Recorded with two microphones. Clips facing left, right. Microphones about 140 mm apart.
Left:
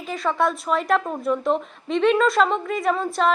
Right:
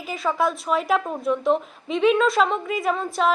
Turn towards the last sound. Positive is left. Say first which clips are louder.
# left 1 dB
turn(degrees=0)  # may be behind; listen again after turning